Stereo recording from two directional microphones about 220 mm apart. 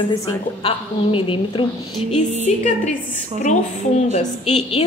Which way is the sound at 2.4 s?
35° left (ahead or behind).